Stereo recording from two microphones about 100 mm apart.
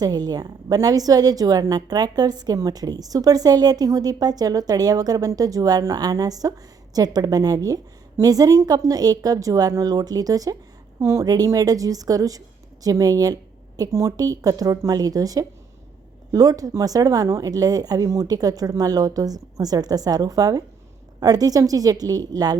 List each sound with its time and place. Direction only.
0.0 s a woman's voice: 40° right (ahead or behind)